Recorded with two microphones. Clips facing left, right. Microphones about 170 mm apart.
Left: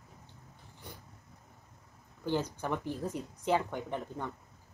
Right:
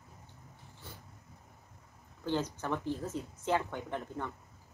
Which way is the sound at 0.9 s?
15° left (ahead or behind).